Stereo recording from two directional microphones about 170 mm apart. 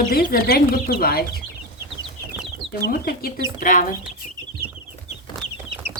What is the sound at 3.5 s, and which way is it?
Speech, 50° left (ahead or behind).